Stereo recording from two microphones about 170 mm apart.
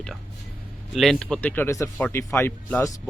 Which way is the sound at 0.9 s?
Centre (ahead or behind).